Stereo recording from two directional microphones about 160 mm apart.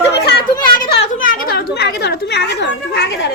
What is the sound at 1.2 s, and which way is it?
Speech, 65° left (ahead or behind).